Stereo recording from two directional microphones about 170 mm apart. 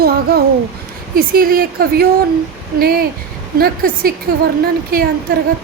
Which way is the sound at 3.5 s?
60° right (ahead or behind).